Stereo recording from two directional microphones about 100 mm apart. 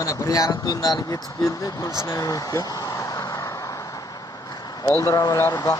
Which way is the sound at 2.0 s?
35° left (ahead or behind).